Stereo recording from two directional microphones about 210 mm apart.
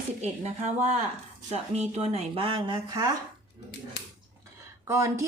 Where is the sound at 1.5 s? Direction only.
30° right (ahead or behind).